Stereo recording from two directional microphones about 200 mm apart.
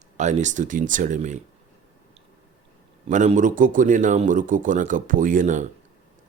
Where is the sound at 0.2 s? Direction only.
35° right (ahead or behind).